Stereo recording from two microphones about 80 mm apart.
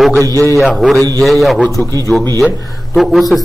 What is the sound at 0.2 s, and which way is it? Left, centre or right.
Speech, right.